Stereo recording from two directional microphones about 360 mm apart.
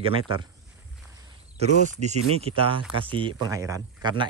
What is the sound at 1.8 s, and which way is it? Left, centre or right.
Speech, centre.